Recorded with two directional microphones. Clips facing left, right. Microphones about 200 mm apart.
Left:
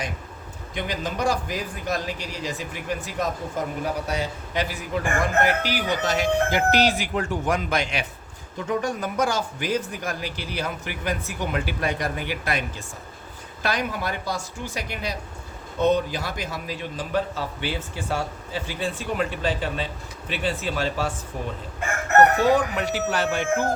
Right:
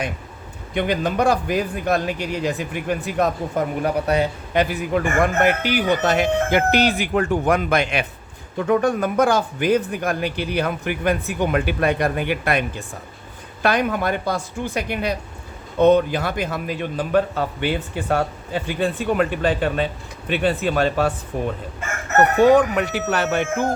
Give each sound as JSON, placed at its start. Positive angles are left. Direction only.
{"t": 0.7, "sound": "a man's voice", "side_deg": -60}